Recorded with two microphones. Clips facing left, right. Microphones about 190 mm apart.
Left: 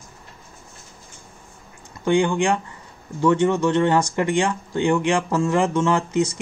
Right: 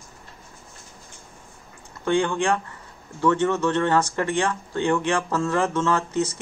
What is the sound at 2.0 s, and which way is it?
Speech, 15° left (ahead or behind).